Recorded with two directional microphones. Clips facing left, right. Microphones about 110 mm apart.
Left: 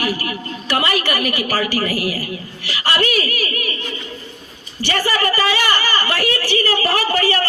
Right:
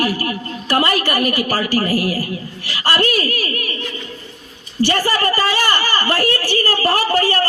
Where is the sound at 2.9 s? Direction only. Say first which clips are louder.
Right 1 dB; 40° right (ahead or behind).